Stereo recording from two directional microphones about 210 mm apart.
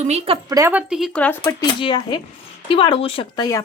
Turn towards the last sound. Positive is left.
turn(degrees=20)  # may be behind; listen again after turning